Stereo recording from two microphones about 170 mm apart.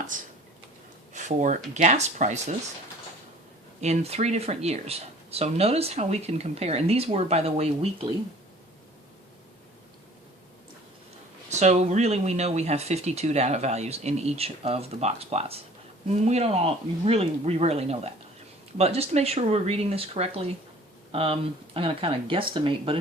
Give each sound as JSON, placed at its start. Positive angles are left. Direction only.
{"t": 0.1, "sound": "speech", "side_deg": -50}
{"t": 3.8, "sound": "speech", "side_deg": -40}
{"t": 11.4, "sound": "speech", "side_deg": -40}